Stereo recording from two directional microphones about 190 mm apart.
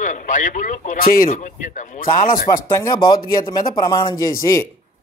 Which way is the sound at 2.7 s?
20° left (ahead or behind).